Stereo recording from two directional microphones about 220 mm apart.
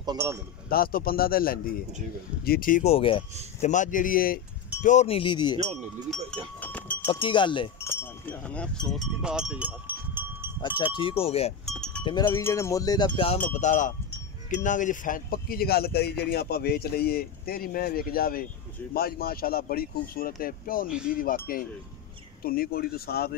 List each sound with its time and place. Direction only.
0.0 s speech: 15° right (ahead or behind)
0.7 s a man's voice: 40° left (ahead or behind); by 3.3 s 25° left (ahead or behind)
3.6 s a man's voice: 35° left (ahead or behind)
4.8 s speech: 30° left (ahead or behind)
6.1 s speech: 25° right (ahead or behind)
6.6 s chink: 10° left (ahead or behind)
7.1 s speech: 20° left (ahead or behind)
7.8 s speech: 10° left (ahead or behind); by 10.5 s 10° right (ahead or behind)
10.8 s speech: 20° left (ahead or behind)
11.6 s sheep: centre (ahead or behind)
12.0 s chime: 20° left (ahead or behind)
12.3 s wind chime: 10° left (ahead or behind)
13.5 s a man's voice: 35° left (ahead or behind)